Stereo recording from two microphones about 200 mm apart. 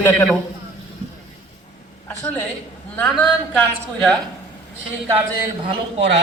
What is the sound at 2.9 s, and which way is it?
A man's voice, 5° left (ahead or behind).